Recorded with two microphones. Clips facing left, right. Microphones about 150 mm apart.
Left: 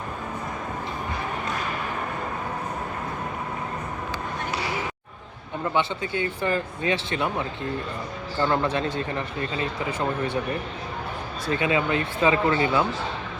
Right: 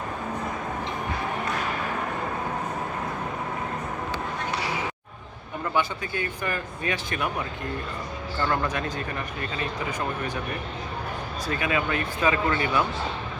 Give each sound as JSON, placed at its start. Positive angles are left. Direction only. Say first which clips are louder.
{"t": 5.7, "sound": "speech", "louder": "left 1 dB", "side_deg": 25}
{"t": 11.4, "sound": "speech", "louder": "left 4 dB", "side_deg": 25}